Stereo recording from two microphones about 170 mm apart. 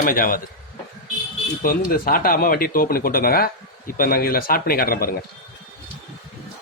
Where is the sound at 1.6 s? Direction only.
55° left (ahead or behind).